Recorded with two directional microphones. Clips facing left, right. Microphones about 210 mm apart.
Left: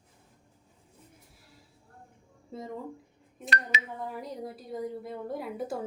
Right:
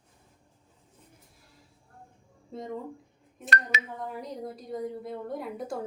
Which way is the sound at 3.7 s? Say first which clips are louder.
Even; 45° right (ahead or behind).